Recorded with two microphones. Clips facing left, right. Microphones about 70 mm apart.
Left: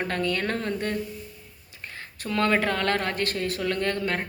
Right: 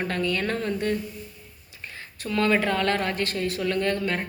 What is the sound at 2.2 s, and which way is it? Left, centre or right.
A woman's voice, left.